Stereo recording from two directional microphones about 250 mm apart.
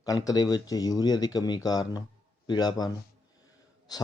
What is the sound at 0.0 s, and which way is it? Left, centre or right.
Speech, centre.